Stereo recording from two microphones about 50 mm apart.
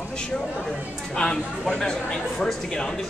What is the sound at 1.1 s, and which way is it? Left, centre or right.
A man's voice, centre.